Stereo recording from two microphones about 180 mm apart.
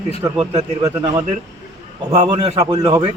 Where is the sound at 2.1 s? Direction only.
25° right (ahead or behind).